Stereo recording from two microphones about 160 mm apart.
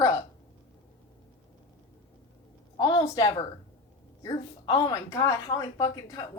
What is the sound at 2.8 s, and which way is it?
Speech, 25° left (ahead or behind).